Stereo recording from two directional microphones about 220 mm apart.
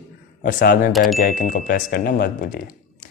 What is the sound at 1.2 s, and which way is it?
Speech, 40° left (ahead or behind).